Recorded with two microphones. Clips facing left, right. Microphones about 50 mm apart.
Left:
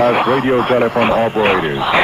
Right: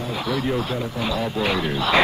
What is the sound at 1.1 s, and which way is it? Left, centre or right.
Speech, left.